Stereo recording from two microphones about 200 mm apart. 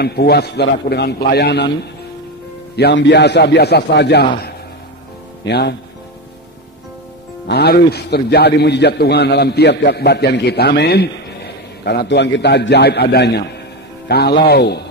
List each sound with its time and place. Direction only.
0.0 s a man's voice: 55° left (ahead or behind)
2.7 s a man's voice: 60° left (ahead or behind)
5.4 s a man's voice: 55° left (ahead or behind)
7.4 s a man's voice: 55° left (ahead or behind)